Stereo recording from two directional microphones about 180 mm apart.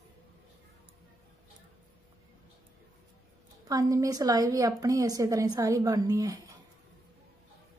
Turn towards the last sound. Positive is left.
turn(degrees=-20)  # may be behind; listen again after turning